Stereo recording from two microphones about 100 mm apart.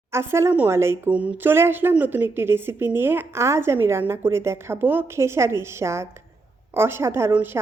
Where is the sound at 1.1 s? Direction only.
15° right (ahead or behind).